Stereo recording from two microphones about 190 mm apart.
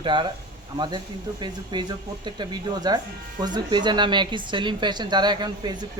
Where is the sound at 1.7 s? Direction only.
20° right (ahead or behind).